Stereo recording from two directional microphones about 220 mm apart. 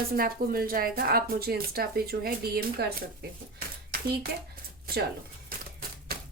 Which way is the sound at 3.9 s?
40° right (ahead or behind).